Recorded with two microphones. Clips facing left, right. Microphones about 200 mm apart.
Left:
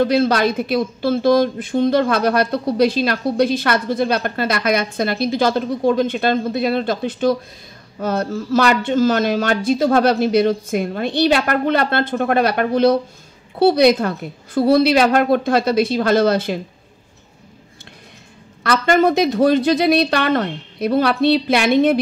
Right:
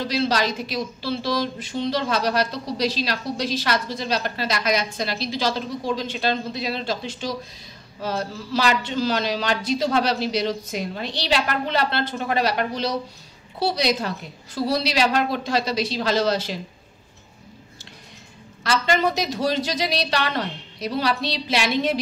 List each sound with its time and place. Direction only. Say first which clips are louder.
0.0 s speech: left 7 dB; 55° left (ahead or behind)
18.6 s speech: left 6 dB; 55° left (ahead or behind)